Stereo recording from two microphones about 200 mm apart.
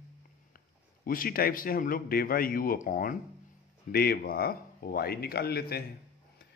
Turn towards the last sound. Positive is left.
turn(degrees=50)  # may be behind; listen again after turning